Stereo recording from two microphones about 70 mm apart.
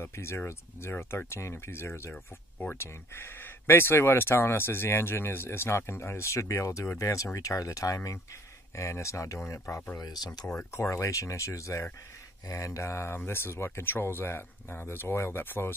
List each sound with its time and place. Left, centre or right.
0.0 s speech: left
9.9 s speech: left
10.4 s speech: centre
10.7 s speech: left